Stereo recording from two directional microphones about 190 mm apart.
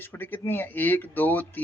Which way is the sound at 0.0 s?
10° left (ahead or behind).